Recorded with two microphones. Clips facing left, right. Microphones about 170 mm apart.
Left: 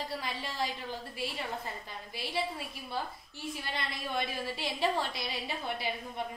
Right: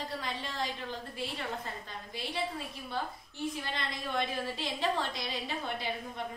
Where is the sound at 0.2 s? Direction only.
10° left (ahead or behind).